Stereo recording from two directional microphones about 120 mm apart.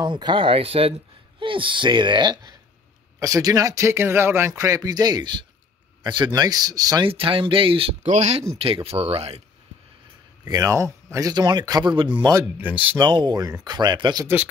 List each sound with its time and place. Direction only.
0.0 s speech: 40° right (ahead or behind)
7.1 s speech: 50° right (ahead or behind)
8.0 s speech: 75° right (ahead or behind)
8.6 s speech: 55° right (ahead or behind)
10.4 s speech: 30° right (ahead or behind)
12.2 s speech: 30° right (ahead or behind)
12.5 s speech: 15° right (ahead or behind)
13.0 s speech: 35° right (ahead or behind)
14.2 s speech: 15° right (ahead or behind)